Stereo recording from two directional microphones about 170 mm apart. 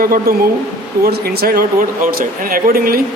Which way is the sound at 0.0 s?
60° right (ahead or behind).